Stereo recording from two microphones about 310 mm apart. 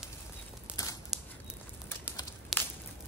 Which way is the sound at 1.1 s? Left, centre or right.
Centre.